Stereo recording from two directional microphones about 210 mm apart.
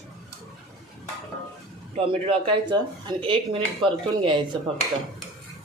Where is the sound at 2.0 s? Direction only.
25° right (ahead or behind).